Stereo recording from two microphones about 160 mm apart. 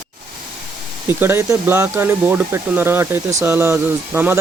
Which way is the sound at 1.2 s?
15° right (ahead or behind).